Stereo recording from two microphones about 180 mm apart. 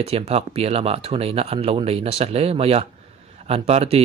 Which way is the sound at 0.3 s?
35° right (ahead or behind).